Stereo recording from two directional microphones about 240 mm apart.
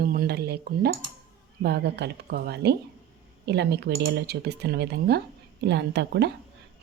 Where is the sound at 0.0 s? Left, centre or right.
Right.